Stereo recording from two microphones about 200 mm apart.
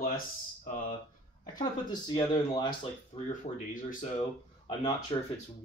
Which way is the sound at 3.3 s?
40° left (ahead or behind).